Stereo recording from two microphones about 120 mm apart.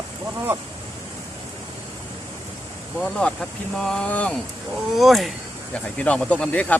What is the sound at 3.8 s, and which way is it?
Speech, 5° left (ahead or behind).